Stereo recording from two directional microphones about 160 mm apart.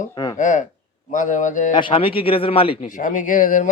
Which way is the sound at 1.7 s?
30° left (ahead or behind).